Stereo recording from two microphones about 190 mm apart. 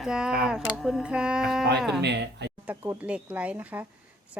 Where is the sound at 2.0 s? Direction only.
65° right (ahead or behind).